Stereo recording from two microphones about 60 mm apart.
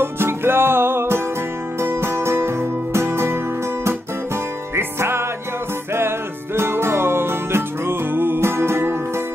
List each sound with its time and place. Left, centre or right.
0.0 s music: right
4.7 s music: right